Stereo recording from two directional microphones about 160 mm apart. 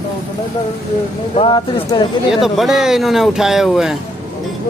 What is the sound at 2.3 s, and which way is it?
Speech, centre (ahead or behind).